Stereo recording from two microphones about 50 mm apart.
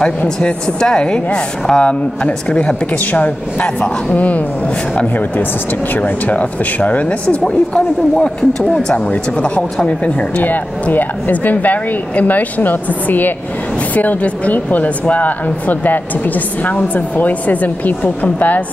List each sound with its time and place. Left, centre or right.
0.2 s a woman's voice: left
5.9 s a woman's voice: left
8.6 s speech: centre
8.9 s a woman's voice: left